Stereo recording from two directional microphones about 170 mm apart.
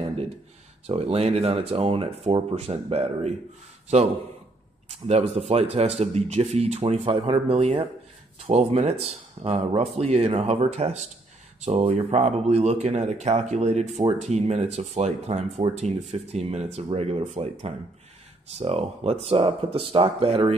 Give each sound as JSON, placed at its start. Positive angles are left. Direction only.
{"t": 0.8, "sound": "speech", "side_deg": -35}
{"t": 4.9, "sound": "speech", "side_deg": -40}